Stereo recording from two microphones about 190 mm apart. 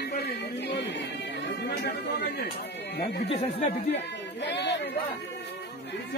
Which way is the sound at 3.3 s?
35° left (ahead or behind).